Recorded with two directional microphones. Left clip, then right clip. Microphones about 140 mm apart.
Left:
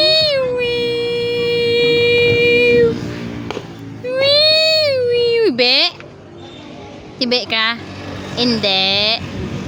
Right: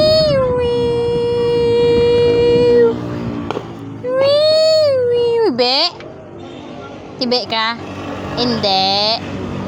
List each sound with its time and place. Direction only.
0.0 s a sound: 20° left (ahead or behind)
1.9 s music: 20° left (ahead or behind)
4.2 s baby cry: 20° left (ahead or behind)
7.2 s a woman's voice: 15° left (ahead or behind)
8.0 s vehicle: centre (ahead or behind)
8.6 s a woman's voice: 15° left (ahead or behind)